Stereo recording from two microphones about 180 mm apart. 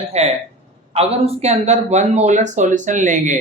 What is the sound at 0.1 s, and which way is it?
Speech, 35° right (ahead or behind).